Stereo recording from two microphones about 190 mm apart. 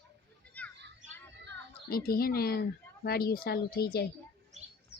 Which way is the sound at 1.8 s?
50° left (ahead or behind).